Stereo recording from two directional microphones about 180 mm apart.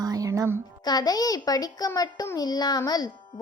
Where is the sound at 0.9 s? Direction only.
20° left (ahead or behind).